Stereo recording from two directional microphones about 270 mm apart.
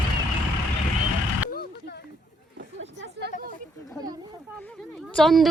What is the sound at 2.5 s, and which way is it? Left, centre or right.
Chatter, right.